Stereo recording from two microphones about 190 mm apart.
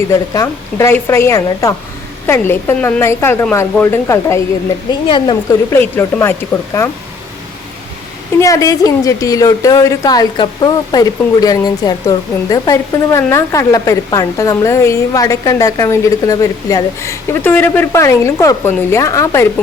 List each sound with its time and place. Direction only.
0.3 s a woman's voice: 15° left (ahead or behind)
4.9 s a woman's voice: 25° left (ahead or behind)
5.7 s a woman's voice: 15° left (ahead or behind)
8.4 s a woman's voice: 15° left (ahead or behind)